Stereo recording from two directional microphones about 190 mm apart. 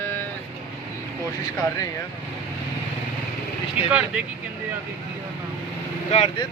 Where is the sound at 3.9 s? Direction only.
5° right (ahead or behind).